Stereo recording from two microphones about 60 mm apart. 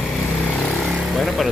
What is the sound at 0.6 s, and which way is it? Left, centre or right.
Vehicle, centre.